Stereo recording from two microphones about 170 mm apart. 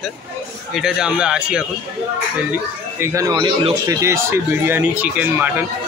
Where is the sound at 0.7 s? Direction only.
5° right (ahead or behind).